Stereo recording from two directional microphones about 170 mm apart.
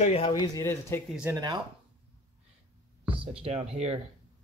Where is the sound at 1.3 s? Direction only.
25° right (ahead or behind).